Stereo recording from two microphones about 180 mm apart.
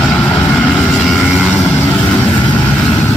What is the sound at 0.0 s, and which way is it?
Vehicle, centre (ahead or behind).